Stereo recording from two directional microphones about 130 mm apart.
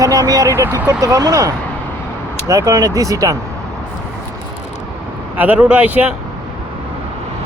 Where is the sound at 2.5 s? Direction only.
25° right (ahead or behind).